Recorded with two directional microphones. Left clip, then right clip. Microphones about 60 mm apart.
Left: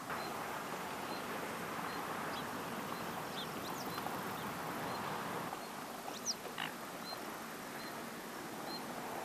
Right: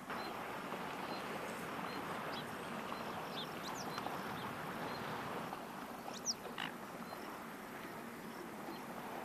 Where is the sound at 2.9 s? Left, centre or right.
Centre.